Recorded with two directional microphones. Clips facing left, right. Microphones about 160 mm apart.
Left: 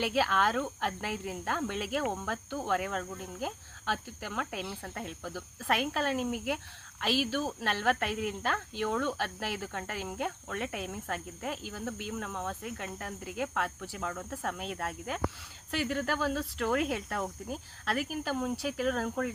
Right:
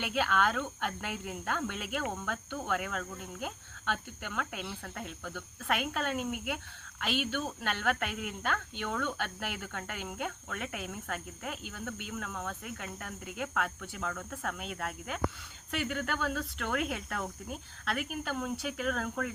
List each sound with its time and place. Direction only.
0.0 s speech: 35° left (ahead or behind)
5.6 s speech: 35° left (ahead or behind)
12.1 s speech: 20° left (ahead or behind)
14.0 s speech: 15° left (ahead or behind)
14.3 s speech: 30° left (ahead or behind)